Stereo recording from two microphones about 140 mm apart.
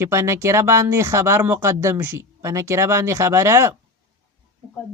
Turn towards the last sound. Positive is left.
turn(degrees=-20)  # may be behind; listen again after turning